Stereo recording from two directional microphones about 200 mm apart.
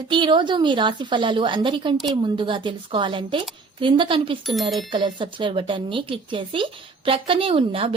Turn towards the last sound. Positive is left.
turn(degrees=-25)  # may be behind; listen again after turning